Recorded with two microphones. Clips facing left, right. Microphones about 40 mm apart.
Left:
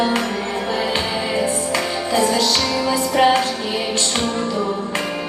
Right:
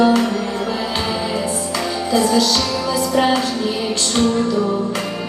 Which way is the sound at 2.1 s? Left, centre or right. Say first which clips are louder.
Right 2 dB; left.